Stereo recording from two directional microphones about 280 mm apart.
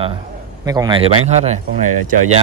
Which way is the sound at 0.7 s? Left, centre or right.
Centre.